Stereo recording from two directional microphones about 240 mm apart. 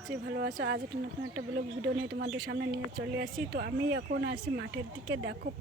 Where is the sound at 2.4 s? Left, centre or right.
Right.